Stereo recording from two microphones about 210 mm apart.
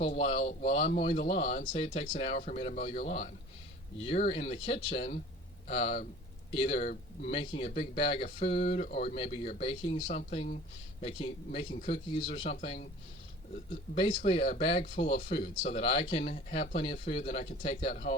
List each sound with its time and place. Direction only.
0.0 s speech: 30° left (ahead or behind)
0.8 s speech: 45° left (ahead or behind); by 12.9 s 30° left (ahead or behind)
13.9 s speech: 25° left (ahead or behind)